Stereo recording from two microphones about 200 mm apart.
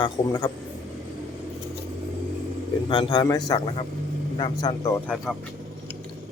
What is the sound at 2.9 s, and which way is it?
A man's voice, 25° left (ahead or behind).